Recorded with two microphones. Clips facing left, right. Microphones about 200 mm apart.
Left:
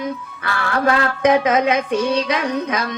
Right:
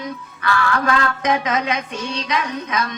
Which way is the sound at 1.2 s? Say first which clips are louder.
Left 5 dB; 55° left (ahead or behind).